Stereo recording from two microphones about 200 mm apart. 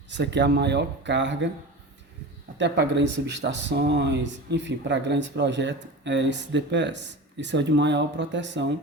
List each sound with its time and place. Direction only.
0.1 s speech: 60° right (ahead or behind)
2.6 s speech: 60° right (ahead or behind)